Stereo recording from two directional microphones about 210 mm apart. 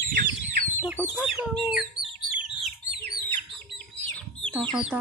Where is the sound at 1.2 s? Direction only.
Centre (ahead or behind).